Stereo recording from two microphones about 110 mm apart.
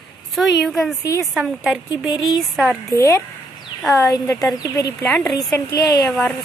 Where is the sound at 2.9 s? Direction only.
30° left (ahead or behind).